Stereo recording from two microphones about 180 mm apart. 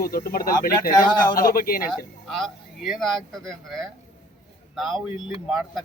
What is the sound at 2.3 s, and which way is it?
A man's voice, centre (ahead or behind).